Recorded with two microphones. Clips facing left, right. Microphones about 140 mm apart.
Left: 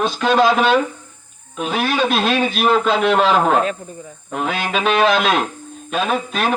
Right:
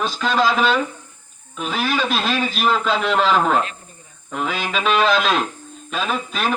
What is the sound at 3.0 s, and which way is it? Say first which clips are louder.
Speech: left 4 dB; 60° left (ahead or behind).